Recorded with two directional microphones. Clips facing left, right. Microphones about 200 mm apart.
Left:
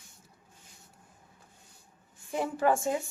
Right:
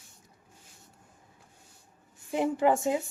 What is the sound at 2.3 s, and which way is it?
Speech, 20° right (ahead or behind).